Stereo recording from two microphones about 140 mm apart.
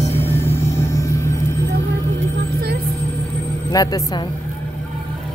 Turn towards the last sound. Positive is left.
turn(degrees=25)  # may be behind; listen again after turning